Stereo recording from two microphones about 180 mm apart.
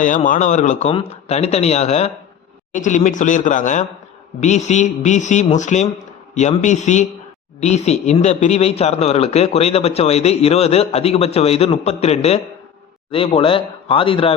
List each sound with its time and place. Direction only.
0.3 s a man's voice: 45° left (ahead or behind)